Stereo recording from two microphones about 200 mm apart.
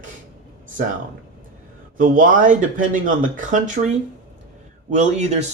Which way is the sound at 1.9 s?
40° right (ahead or behind).